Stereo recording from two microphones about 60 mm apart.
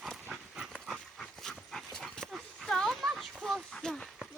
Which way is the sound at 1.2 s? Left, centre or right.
Centre.